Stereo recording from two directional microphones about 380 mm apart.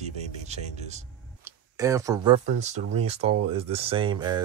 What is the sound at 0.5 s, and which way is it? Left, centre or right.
Speech, centre.